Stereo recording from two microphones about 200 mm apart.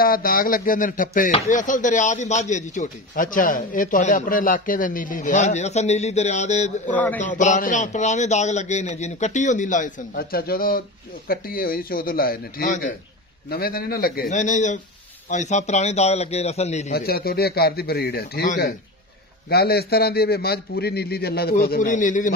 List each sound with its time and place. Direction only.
0.0 s a man's voice: 45° left (ahead or behind)
6.9 s a man's voice: 10° left (ahead or behind)
7.2 s a man's voice: 40° left (ahead or behind)
14.3 s a man's voice: 35° left (ahead or behind)
16.9 s speech: 50° left (ahead or behind)